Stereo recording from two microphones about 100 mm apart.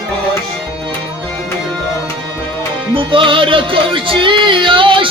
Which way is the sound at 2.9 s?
60° right (ahead or behind).